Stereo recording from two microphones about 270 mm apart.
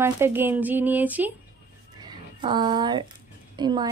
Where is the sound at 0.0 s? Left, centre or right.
Centre.